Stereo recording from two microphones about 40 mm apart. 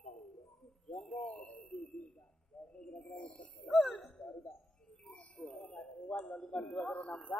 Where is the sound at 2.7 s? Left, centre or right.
Left.